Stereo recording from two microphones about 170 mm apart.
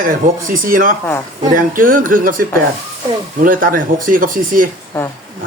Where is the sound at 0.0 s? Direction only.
55° right (ahead or behind).